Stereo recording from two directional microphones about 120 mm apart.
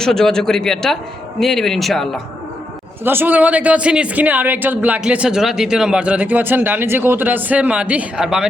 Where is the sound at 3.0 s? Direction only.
15° right (ahead or behind).